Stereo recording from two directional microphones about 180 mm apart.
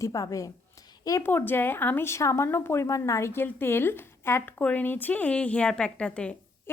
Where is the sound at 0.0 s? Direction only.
20° left (ahead or behind).